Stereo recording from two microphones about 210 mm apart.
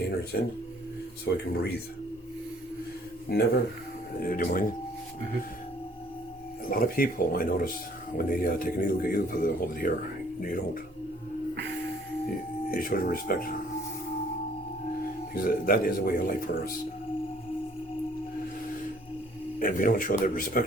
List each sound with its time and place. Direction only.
1.3 s speech: 55° left (ahead or behind)
3.2 s a man's voice: 50° left (ahead or behind)
6.7 s a man's voice: 45° left (ahead or behind)
12.7 s a man's voice: 45° left (ahead or behind)
15.4 s a man's voice: 45° left (ahead or behind)
19.5 s a man's voice: 40° left (ahead or behind)